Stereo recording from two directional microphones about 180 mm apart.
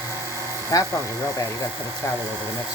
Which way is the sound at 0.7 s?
20° left (ahead or behind).